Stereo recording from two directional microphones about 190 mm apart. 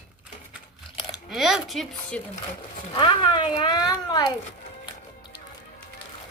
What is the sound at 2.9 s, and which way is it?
A child's voice, 25° left (ahead or behind).